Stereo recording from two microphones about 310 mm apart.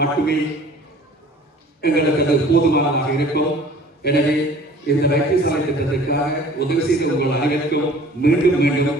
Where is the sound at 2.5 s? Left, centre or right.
Left.